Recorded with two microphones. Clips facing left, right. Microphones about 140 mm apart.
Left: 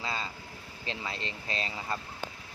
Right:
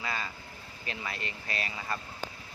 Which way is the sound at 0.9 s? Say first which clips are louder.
Left 1 dB; 25° left (ahead or behind).